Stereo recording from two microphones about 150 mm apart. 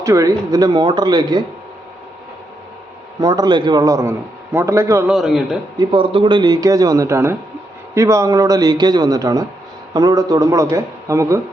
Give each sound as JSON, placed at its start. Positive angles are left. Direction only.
{"t": 0.0, "sound": "a man's voice", "side_deg": -25}
{"t": 3.2, "sound": "a man's voice", "side_deg": -25}
{"t": 5.0, "sound": "a man's voice", "side_deg": 0}
{"t": 5.9, "sound": "a man's voice", "side_deg": -35}